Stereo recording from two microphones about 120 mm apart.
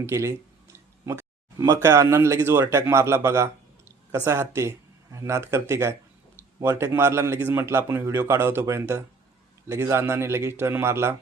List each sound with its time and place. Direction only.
0.0 s speech: 25° right (ahead or behind)